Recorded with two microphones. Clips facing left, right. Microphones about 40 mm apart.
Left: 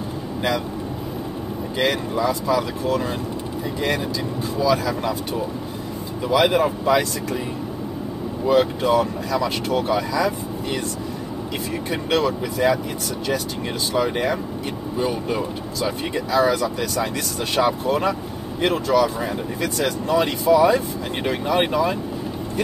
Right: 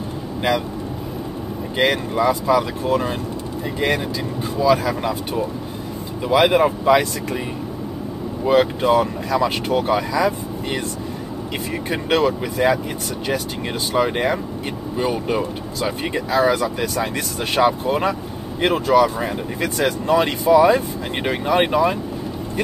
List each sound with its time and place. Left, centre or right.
1.8 s speech: right
4.6 s speech: right
6.2 s speech: right
8.5 s speech: right
11.9 s speech: right
13.9 s speech: right